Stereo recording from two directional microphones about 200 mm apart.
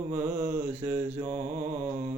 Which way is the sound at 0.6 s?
10° right (ahead or behind).